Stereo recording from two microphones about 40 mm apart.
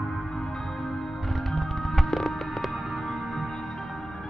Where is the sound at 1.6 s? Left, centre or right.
Centre.